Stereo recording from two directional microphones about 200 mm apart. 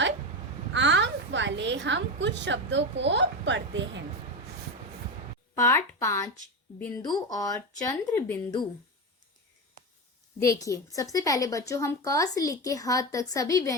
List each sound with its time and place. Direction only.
0.7 s a sound: 65° right (ahead or behind)
2.2 s a woman's voice: 65° right (ahead or behind)
5.5 s a woman's voice: 15° left (ahead or behind)
10.4 s a woman's voice: 15° left (ahead or behind)